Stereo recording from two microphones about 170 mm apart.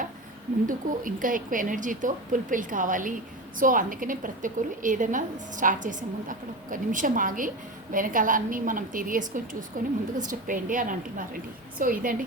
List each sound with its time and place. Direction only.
0.7 s a woman's voice: 50° right (ahead or behind)